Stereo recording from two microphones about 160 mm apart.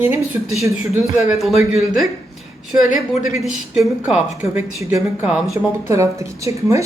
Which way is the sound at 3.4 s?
5° right (ahead or behind).